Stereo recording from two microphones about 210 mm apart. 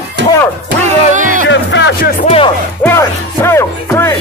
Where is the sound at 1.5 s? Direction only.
60° left (ahead or behind).